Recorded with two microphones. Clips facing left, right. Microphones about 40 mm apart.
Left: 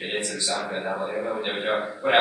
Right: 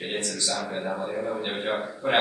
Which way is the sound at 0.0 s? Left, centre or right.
Centre.